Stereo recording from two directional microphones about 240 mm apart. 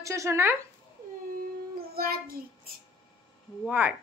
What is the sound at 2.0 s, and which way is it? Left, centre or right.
Child singing, right.